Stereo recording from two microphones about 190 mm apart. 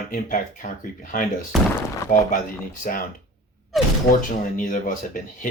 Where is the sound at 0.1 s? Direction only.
45° left (ahead or behind).